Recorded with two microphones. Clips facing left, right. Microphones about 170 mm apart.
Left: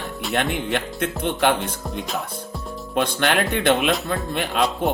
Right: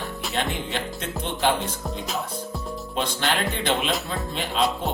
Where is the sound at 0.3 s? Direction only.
60° left (ahead or behind).